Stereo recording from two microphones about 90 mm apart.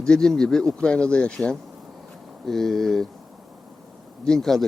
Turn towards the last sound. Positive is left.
turn(degrees=5)  # may be behind; listen again after turning